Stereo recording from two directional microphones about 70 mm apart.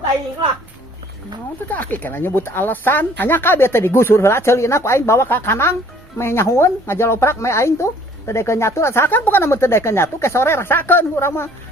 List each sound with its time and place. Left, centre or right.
1.7 s speech: left